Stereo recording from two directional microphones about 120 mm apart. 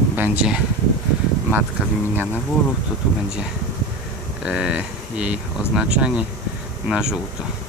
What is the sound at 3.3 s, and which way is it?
Speech, 5° right (ahead or behind).